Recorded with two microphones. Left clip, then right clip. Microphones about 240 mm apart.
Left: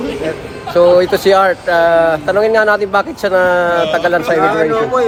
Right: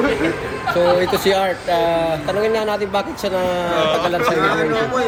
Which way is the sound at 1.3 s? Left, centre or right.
Left.